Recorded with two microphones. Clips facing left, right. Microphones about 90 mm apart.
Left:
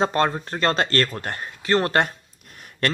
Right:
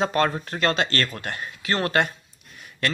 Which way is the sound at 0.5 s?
40° left (ahead or behind).